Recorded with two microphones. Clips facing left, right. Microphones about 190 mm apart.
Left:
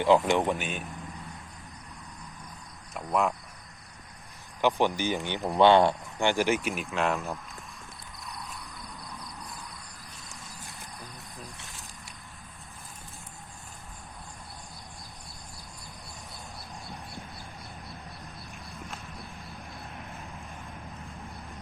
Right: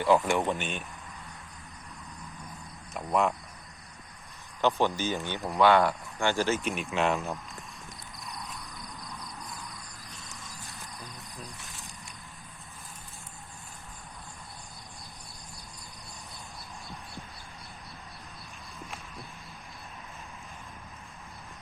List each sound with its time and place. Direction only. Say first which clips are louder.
0.0 s speech: left 2 dB; 20° left (ahead or behind)
2.9 s speech: even; centre (ahead or behind)
4.6 s speech: left 1 dB; 15° left (ahead or behind)